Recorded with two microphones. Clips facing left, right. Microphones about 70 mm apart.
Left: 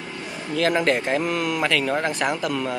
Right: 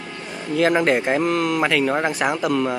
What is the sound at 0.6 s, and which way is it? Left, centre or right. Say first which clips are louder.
Speech: right 3 dB; centre.